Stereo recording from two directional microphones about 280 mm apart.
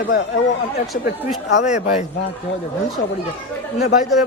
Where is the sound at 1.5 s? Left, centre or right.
Left.